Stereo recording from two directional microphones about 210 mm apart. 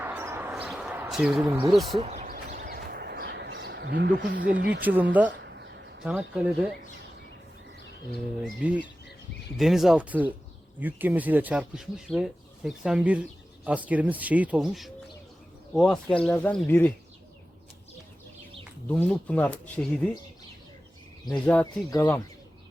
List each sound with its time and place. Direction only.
0.0 s a sound: 10° right (ahead or behind)
1.5 s speech: 15° right (ahead or behind)
1.7 s speech: centre (ahead or behind)
2.2 s a sound: 45° right (ahead or behind)
4.5 s speech: 45° right (ahead or behind)
4.8 s speech: 10° right (ahead or behind)
5.4 s a sound: 55° right (ahead or behind)
6.1 s speech: 5° right (ahead or behind)
8.4 s speech: 5° right (ahead or behind)
18.9 s speech: 5° left (ahead or behind)
21.2 s speech: 5° left (ahead or behind)